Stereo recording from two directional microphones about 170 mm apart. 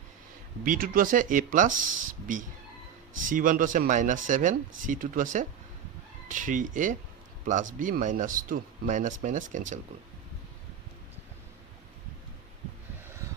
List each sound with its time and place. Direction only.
0.6 s speech: 55° right (ahead or behind)